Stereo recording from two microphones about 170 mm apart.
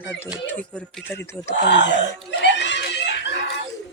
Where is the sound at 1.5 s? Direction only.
90° left.